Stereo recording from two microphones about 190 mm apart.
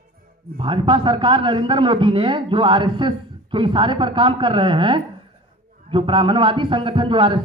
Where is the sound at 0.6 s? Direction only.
25° right (ahead or behind).